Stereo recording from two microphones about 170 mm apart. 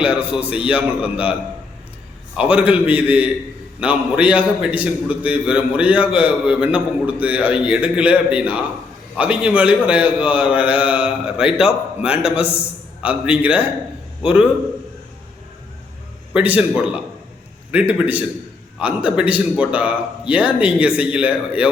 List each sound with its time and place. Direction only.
0.1 s a man's voice: 35° left (ahead or behind)
0.7 s a man's voice: 5° right (ahead or behind)
16.3 s a man's voice: 10° right (ahead or behind)